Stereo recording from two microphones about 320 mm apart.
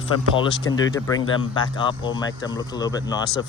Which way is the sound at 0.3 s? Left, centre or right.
Centre.